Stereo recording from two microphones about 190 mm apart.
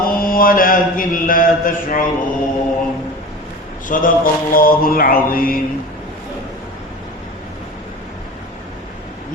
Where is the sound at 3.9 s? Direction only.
45° left (ahead or behind).